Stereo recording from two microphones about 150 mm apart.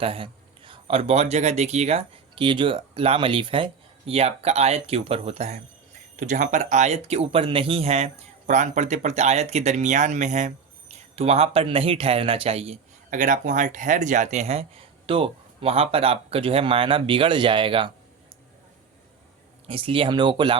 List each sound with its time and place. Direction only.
0.0 s speech: 35° right (ahead or behind)
6.1 s speech: 60° right (ahead or behind); by 12.8 s 40° right (ahead or behind)
13.1 s speech: 60° right (ahead or behind); by 17.9 s 35° right (ahead or behind)
19.6 s speech: 35° right (ahead or behind)